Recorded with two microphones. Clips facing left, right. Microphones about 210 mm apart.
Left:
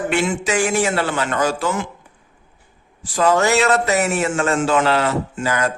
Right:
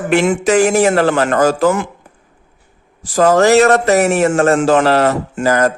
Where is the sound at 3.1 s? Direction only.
40° right (ahead or behind).